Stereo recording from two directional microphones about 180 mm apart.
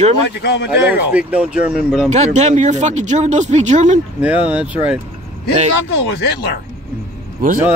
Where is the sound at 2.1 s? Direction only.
40° right (ahead or behind).